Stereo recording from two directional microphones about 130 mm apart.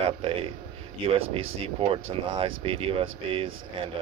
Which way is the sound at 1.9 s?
45° right (ahead or behind).